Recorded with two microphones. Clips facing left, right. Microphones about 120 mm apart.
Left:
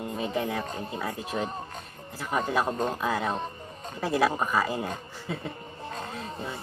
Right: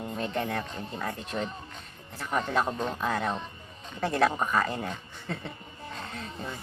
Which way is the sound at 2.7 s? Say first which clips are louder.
Left 3 dB; 40° left (ahead or behind).